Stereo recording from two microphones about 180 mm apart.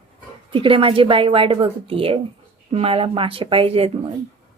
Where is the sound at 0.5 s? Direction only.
30° right (ahead or behind).